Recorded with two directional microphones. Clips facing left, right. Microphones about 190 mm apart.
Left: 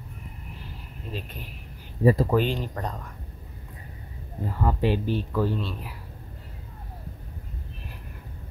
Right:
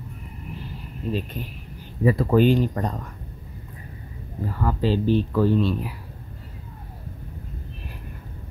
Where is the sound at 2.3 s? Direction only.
5° right (ahead or behind).